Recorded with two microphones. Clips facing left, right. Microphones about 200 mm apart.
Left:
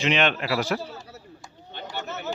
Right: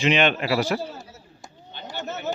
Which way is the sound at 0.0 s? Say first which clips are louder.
Right 3 dB; centre (ahead or behind).